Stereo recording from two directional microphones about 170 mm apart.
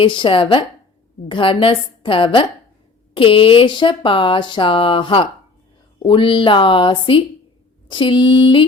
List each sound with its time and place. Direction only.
0.0 s a woman's voice: 30° left (ahead or behind)